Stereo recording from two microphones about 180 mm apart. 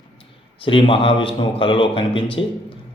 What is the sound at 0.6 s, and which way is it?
A man's voice, 30° left (ahead or behind).